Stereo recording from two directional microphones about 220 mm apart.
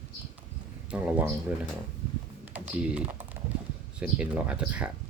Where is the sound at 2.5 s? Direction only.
5° right (ahead or behind).